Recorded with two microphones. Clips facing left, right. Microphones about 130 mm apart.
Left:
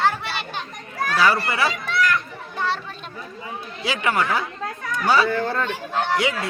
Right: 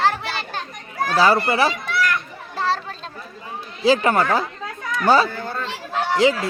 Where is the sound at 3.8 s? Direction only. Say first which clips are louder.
Right 6 dB; 35° right (ahead or behind).